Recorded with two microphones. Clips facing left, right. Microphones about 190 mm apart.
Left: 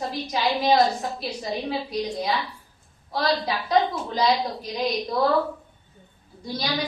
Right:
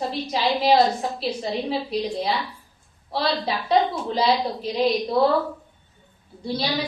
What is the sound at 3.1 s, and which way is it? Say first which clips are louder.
A woman's voice: even; 30° right (ahead or behind).